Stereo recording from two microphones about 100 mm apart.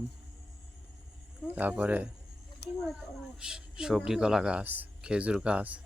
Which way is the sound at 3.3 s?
5° right (ahead or behind).